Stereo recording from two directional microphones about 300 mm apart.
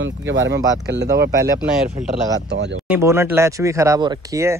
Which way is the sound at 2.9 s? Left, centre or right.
Centre.